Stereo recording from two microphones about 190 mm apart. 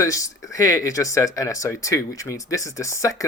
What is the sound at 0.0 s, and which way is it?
Speech, 15° left (ahead or behind).